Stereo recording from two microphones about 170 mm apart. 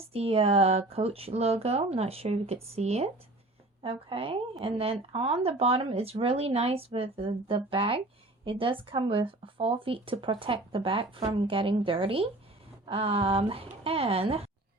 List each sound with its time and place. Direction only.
0.0 s a woman's voice: 35° right (ahead or behind)